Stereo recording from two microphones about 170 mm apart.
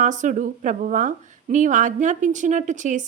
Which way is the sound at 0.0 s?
45° right (ahead or behind).